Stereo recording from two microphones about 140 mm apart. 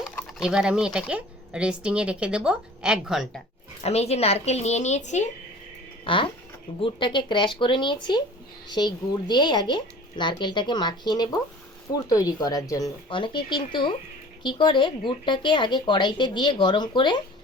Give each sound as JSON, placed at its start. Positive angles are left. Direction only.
{"t": 0.3, "sound": "speech", "side_deg": -5}
{"t": 3.8, "sound": "a woman's voice", "side_deg": 50}
{"t": 6.1, "sound": "a woman's voice", "side_deg": 35}
{"t": 13.1, "sound": "speech", "side_deg": 35}